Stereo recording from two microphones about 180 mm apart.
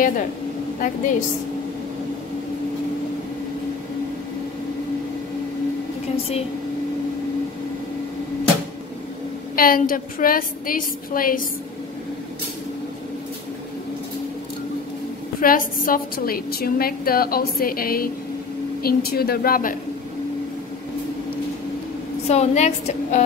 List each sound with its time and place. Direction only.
0.7 s a woman's voice: 45° left (ahead or behind)
9.6 s a woman's voice: 50° left (ahead or behind)
15.4 s a woman's voice: 50° left (ahead or behind)
22.3 s a woman's voice: 40° left (ahead or behind)